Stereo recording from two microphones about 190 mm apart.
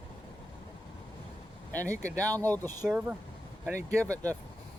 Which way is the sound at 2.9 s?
5° right (ahead or behind).